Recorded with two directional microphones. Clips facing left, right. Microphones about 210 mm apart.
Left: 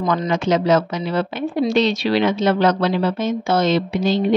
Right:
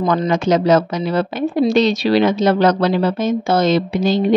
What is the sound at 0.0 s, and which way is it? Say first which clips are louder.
Speech: right 3 dB; 35° right (ahead or behind).